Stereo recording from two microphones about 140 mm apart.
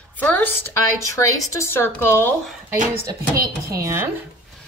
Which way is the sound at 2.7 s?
20° right (ahead or behind).